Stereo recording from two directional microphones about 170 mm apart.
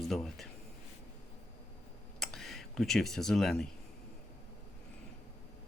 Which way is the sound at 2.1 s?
Centre (ahead or behind).